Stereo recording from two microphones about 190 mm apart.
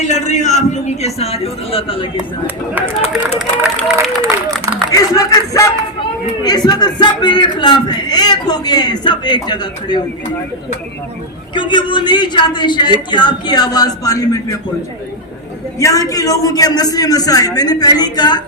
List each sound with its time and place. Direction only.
0.0 s a man's voice: 40° left (ahead or behind)
3.2 s speech: 5° right (ahead or behind)
4.9 s a man's voice: 15° left (ahead or behind)
11.5 s a man's voice: 25° left (ahead or behind)
15.8 s a man's voice: 15° left (ahead or behind)